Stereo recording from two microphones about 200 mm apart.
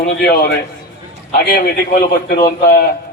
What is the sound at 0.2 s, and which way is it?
Speech, 55° left (ahead or behind).